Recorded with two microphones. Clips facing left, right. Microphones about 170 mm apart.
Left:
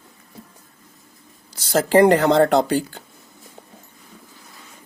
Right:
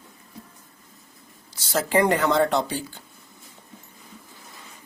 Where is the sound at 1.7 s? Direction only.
35° left (ahead or behind).